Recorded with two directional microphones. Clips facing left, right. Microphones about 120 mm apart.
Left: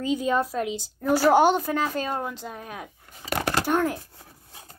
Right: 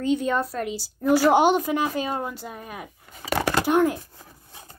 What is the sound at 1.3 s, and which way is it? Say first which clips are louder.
A woman's voice: even; 15° right (ahead or behind).